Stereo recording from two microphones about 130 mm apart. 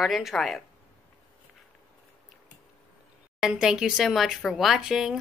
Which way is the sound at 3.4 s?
5° right (ahead or behind).